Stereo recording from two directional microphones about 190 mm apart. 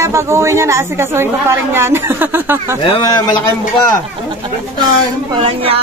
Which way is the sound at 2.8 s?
25° left (ahead or behind).